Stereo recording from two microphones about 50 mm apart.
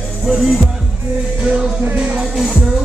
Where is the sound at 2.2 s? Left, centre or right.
Centre.